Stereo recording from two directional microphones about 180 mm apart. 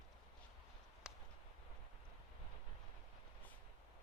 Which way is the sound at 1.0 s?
5° right (ahead or behind).